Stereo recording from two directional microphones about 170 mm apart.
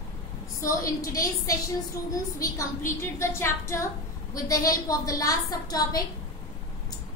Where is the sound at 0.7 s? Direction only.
20° left (ahead or behind).